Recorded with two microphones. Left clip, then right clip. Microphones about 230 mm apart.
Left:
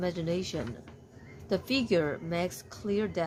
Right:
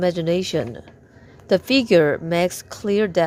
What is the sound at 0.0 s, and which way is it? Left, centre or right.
A woman's voice, right.